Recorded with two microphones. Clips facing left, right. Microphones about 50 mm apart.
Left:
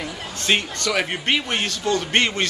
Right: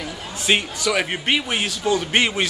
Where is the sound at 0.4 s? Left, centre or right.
Centre.